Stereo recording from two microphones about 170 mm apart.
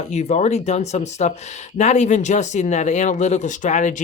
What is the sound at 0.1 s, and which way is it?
Speech, 40° left (ahead or behind).